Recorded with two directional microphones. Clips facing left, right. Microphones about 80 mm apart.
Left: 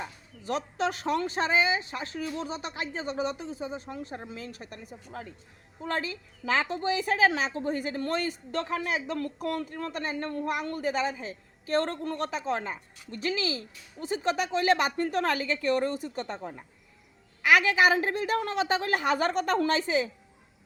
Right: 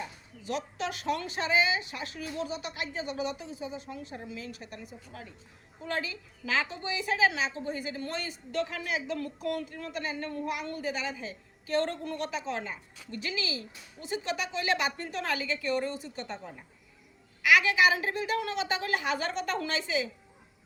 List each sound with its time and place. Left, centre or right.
0.4 s a woman's voice: left